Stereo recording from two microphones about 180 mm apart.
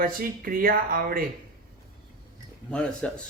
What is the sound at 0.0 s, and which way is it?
Speech, 50° right (ahead or behind).